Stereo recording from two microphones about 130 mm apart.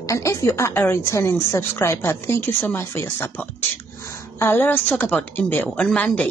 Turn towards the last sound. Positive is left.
turn(degrees=10)  # may be behind; listen again after turning